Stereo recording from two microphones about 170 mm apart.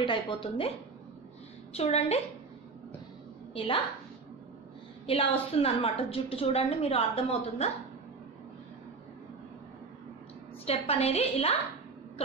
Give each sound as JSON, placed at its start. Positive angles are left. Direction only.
{"t": 0.0, "sound": "a woman's voice", "side_deg": 30}
{"t": 1.7, "sound": "a woman's voice", "side_deg": 40}
{"t": 3.5, "sound": "a woman's voice", "side_deg": 35}
{"t": 5.0, "sound": "a woman's voice", "side_deg": 35}
{"t": 10.6, "sound": "a woman's voice", "side_deg": 35}